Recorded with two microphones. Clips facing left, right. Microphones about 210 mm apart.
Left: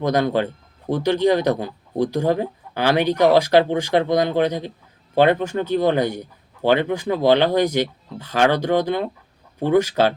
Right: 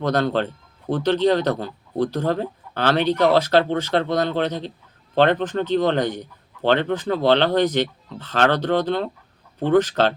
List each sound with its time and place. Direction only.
0.0 s a man's voice: 10° left (ahead or behind)